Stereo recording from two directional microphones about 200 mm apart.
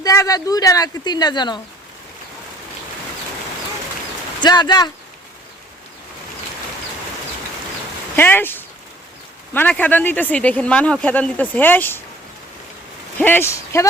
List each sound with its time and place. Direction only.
0.0 s speech: 15° left (ahead or behind)
4.4 s speech: 20° left (ahead or behind)
8.1 s speech: 10° left (ahead or behind)
13.1 s speech: 10° left (ahead or behind)